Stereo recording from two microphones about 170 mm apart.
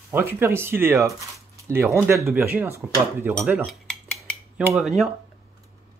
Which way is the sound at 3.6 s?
Centre (ahead or behind).